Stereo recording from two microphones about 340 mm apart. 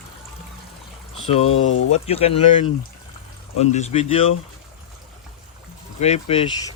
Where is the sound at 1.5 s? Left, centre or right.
Left.